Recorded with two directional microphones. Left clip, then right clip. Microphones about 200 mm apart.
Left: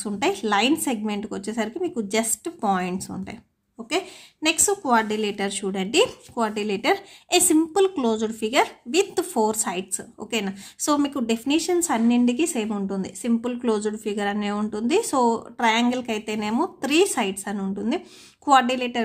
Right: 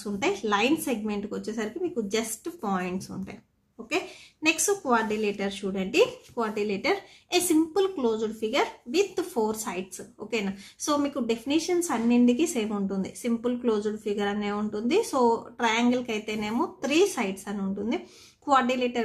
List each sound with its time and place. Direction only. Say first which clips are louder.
0.0 s a woman's voice: left 4 dB; 35° left (ahead or behind)